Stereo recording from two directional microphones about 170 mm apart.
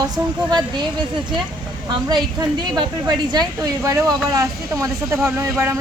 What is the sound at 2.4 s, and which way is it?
Speech, 25° right (ahead or behind).